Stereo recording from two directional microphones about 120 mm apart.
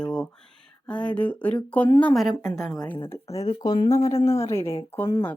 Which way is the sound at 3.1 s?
25° left (ahead or behind).